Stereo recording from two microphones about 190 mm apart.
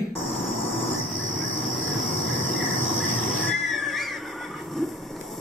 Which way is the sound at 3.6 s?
Centre (ahead or behind).